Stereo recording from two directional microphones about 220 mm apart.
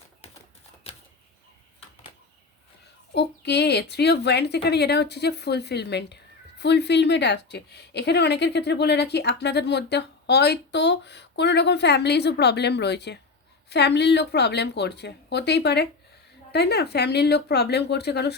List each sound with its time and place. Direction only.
3.2 s a woman's voice: 50° left (ahead or behind)